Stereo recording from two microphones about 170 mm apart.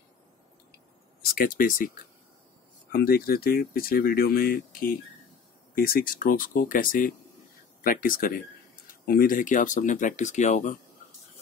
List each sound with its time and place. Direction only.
1.2 s speech: 60° left (ahead or behind)
2.9 s speech: 65° left (ahead or behind); by 10.8 s 45° left (ahead or behind)